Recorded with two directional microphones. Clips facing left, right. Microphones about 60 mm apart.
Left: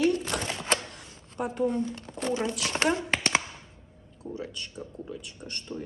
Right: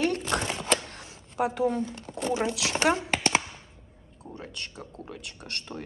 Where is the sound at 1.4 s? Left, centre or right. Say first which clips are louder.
Right 2 dB; right.